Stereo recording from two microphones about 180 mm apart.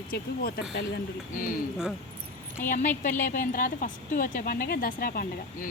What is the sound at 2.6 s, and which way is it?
A woman's voice, 45° left (ahead or behind).